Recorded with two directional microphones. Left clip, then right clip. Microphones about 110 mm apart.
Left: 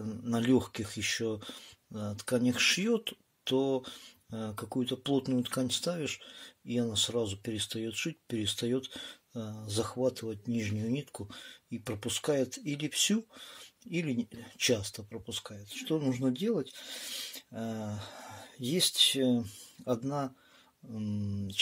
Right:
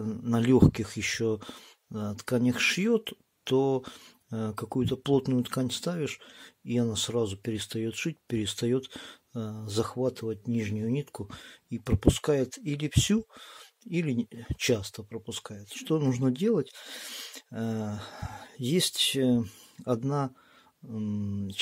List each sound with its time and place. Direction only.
0.0 s speech: 50° right (ahead or behind)
6.7 s speech: 60° right (ahead or behind); by 11.1 s 35° right (ahead or behind)
11.1 s speech: 60° right (ahead or behind); by 15.2 s 35° right (ahead or behind)
15.2 s speech: 60° right (ahead or behind)
20.9 s speech: 40° right (ahead or behind)